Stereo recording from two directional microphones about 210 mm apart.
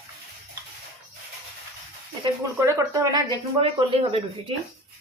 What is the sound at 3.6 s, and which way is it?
Speech, 25° right (ahead or behind).